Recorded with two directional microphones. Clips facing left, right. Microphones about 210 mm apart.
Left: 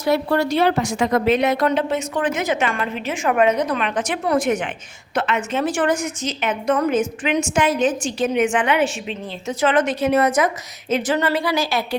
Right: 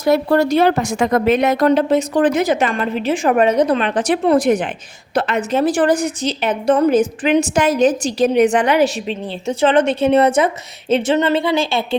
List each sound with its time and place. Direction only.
0.0 s a woman's voice: 45° right (ahead or behind); by 11.9 s 25° right (ahead or behind)